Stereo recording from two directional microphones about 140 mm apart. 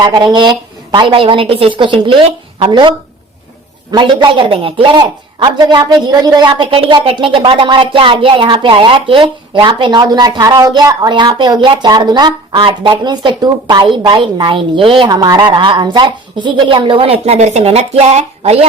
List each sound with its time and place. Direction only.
0.0 s speech: 30° right (ahead or behind)
3.9 s speech: 35° right (ahead or behind); by 18.6 s 50° right (ahead or behind)